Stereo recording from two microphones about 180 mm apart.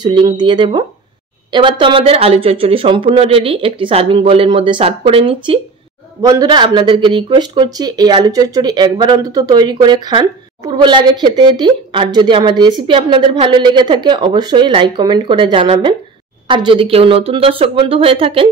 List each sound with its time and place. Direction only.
0.0 s speech: 25° right (ahead or behind)